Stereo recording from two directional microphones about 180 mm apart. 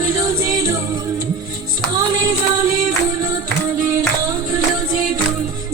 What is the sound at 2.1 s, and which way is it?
Music, 20° right (ahead or behind).